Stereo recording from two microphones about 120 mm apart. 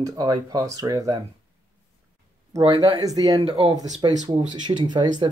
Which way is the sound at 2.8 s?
30° right (ahead or behind).